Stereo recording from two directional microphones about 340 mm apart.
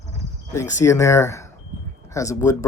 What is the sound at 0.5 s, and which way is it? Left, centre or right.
Speech, centre.